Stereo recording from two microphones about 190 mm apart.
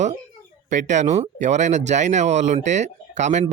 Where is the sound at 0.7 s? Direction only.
40° right (ahead or behind).